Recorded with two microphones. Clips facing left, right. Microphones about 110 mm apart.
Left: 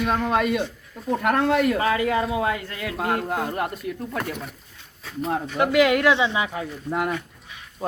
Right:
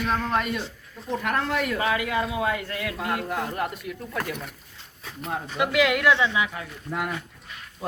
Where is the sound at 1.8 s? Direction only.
30° left (ahead or behind).